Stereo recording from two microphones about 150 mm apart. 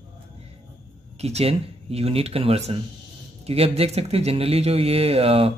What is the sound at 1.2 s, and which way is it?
Speech, 45° right (ahead or behind).